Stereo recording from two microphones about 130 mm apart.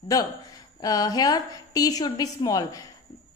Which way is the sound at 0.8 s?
30° left (ahead or behind).